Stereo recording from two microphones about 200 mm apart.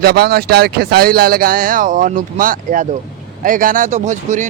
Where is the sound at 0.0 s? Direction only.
50° right (ahead or behind).